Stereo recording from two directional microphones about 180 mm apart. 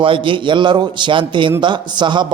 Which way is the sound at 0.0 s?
30° right (ahead or behind).